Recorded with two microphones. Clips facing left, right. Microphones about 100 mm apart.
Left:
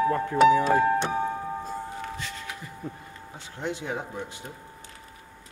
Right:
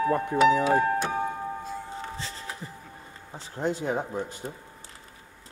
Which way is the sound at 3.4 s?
40° right (ahead or behind).